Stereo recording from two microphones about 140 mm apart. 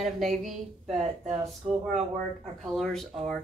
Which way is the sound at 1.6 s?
50° right (ahead or behind).